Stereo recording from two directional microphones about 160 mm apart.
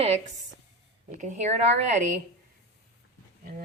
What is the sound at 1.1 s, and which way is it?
Speech, 50° right (ahead or behind).